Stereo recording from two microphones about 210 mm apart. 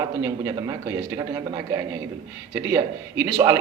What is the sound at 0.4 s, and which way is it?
Speech, 15° right (ahead or behind).